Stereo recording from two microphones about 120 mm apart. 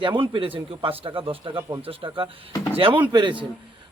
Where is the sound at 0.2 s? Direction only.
50° right (ahead or behind).